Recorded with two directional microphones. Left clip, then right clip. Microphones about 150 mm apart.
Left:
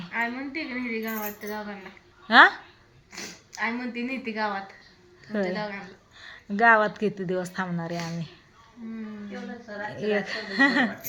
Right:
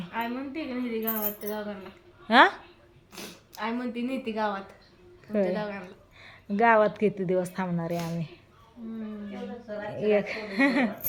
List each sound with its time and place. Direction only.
0.0 s a woman's voice: 20° right (ahead or behind)
5.3 s a woman's voice: 15° right (ahead or behind)
5.5 s speech: 40° right (ahead or behind)
6.1 s a woman's voice: 15° right (ahead or behind)
9.9 s a woman's voice: 10° right (ahead or behind)